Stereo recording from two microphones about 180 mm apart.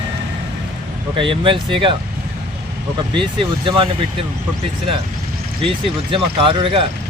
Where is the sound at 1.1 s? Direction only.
30° right (ahead or behind).